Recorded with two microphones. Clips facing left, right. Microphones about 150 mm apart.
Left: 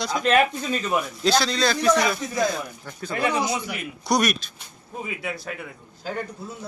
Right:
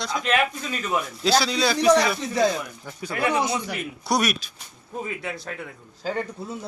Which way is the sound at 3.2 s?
25° right (ahead or behind).